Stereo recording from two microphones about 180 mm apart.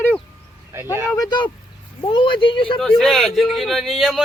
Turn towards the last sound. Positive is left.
turn(degrees=0)  # may be behind; listen again after turning